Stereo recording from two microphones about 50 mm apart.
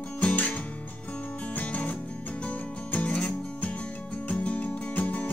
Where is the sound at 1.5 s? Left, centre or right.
Left.